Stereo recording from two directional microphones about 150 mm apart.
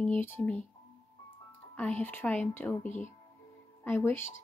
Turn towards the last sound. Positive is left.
turn(degrees=15)  # may be behind; listen again after turning